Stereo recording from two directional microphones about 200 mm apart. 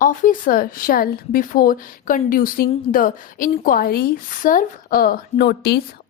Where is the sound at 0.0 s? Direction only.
40° left (ahead or behind).